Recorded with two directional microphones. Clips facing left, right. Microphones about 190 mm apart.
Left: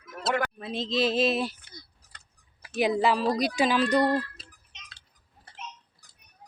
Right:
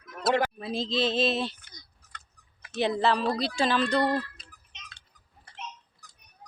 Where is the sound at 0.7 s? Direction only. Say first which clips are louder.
Left 4 dB; 30° right (ahead or behind).